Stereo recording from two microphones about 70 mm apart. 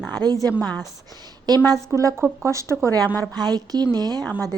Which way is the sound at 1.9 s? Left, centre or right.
Right.